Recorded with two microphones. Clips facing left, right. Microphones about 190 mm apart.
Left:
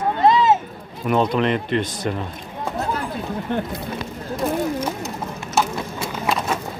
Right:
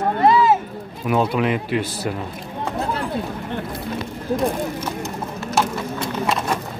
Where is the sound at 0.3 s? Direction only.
20° left (ahead or behind).